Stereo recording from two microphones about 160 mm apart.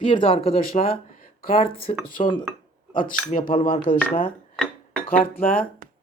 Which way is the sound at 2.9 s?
60° left (ahead or behind).